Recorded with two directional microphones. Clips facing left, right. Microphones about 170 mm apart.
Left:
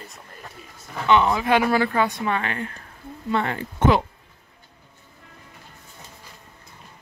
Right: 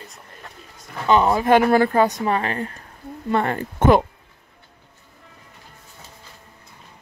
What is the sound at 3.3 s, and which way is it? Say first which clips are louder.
Speech: right 3 dB; 45° right (ahead or behind).